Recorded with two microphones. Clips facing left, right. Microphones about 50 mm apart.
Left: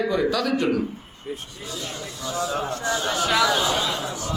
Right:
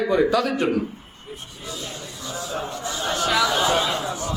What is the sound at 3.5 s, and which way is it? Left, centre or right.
Speech, right.